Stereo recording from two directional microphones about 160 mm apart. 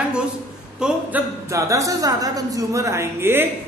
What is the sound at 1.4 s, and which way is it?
A woman's voice, 20° right (ahead or behind).